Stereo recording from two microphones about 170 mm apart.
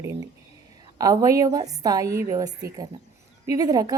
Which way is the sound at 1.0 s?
20° right (ahead or behind).